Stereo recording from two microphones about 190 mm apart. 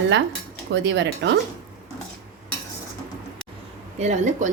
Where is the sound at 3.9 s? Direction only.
35° right (ahead or behind).